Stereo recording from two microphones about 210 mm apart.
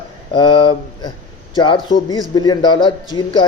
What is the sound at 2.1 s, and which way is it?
A man's voice, 20° left (ahead or behind).